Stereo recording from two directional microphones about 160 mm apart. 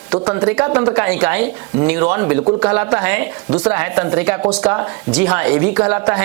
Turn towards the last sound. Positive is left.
turn(degrees=-10)  # may be behind; listen again after turning